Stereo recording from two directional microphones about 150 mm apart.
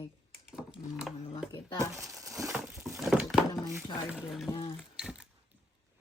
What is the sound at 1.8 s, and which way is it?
Crumpling, 20° right (ahead or behind).